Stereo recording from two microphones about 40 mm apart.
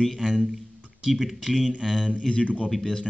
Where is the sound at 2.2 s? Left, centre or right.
Left.